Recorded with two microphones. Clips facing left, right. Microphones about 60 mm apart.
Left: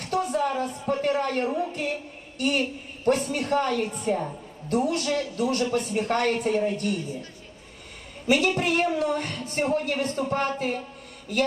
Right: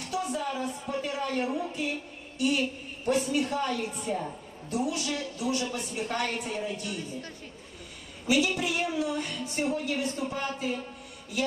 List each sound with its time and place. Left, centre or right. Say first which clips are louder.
0.0 s a sound: left 6 dB; left
3.1 s a woman's voice: left 3 dB; left
8.3 s a woman's voice: left 4 dB; left